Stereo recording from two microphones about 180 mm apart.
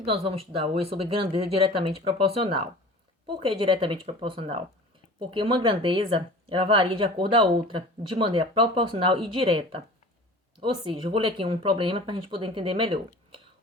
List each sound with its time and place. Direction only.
0.0 s a woman's voice: 30° right (ahead or behind)